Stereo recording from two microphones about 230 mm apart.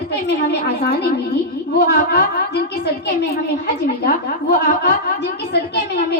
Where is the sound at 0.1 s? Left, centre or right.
Left.